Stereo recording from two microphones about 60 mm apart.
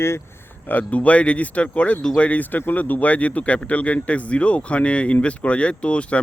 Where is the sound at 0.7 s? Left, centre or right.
Left.